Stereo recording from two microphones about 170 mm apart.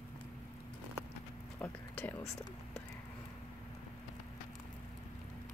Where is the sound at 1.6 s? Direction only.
10° left (ahead or behind).